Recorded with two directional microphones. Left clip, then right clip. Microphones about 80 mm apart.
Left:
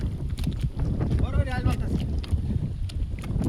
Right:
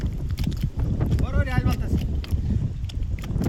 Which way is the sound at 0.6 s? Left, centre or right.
Centre.